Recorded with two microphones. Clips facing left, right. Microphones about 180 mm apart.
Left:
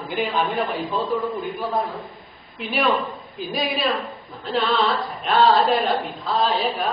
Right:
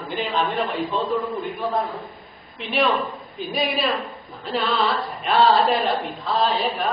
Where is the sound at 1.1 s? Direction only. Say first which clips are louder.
Even; centre (ahead or behind).